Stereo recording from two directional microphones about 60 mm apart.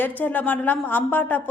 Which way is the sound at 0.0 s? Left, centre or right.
Left.